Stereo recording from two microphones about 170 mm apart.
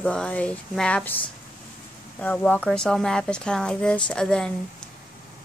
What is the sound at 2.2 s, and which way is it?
Speech, 10° left (ahead or behind).